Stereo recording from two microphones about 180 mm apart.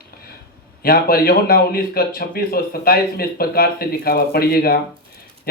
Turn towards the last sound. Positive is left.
turn(degrees=55)  # may be behind; listen again after turning